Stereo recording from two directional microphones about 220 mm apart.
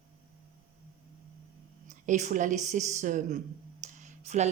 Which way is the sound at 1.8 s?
35° right (ahead or behind).